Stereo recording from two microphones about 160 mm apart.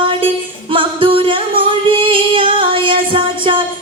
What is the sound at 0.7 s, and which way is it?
Female singing, 35° right (ahead or behind).